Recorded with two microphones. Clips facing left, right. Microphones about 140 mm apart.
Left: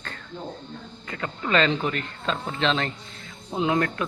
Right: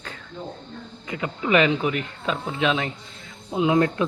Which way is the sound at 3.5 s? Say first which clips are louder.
Right 4 dB; 20° right (ahead or behind).